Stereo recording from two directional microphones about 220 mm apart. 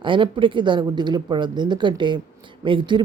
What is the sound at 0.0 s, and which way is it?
Speech, 20° right (ahead or behind).